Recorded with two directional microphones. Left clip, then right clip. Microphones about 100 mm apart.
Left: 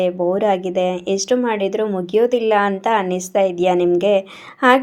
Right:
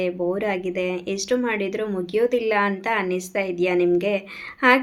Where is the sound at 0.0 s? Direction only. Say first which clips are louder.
Left 7 dB; 60° left (ahead or behind).